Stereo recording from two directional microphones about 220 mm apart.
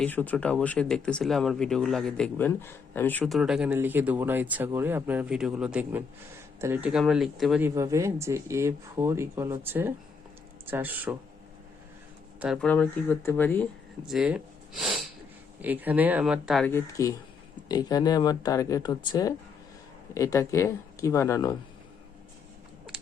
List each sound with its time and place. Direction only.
0.0 s speech: 10° left (ahead or behind); by 11.1 s 10° right (ahead or behind)
12.4 s speech: centre (ahead or behind)
14.1 s speech: 5° right (ahead or behind)
14.8 s a sound: centre (ahead or behind)
15.6 s speech: 10° right (ahead or behind); by 21.5 s 15° left (ahead or behind)